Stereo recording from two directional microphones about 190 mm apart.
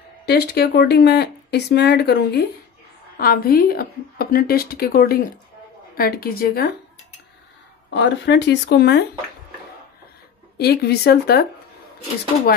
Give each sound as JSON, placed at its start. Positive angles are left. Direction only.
{"t": 0.3, "sound": "a woman's voice", "side_deg": 60}
{"t": 7.9, "sound": "speech", "side_deg": 65}
{"t": 10.6, "sound": "speech", "side_deg": 55}